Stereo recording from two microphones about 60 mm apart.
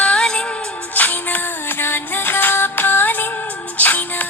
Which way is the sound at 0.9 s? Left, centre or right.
Left.